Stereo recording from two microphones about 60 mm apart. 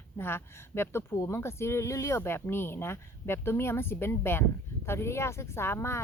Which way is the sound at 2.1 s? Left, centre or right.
Left.